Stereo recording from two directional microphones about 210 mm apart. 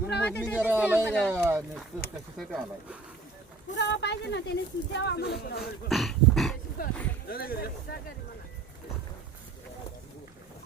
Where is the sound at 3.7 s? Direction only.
55° left (ahead or behind).